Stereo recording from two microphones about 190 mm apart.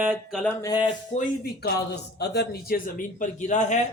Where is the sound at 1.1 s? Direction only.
35° left (ahead or behind).